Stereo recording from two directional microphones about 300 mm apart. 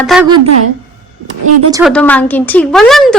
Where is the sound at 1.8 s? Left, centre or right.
Centre.